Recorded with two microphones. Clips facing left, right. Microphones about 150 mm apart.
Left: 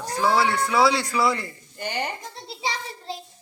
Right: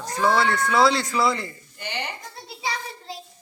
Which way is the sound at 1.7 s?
45° left (ahead or behind).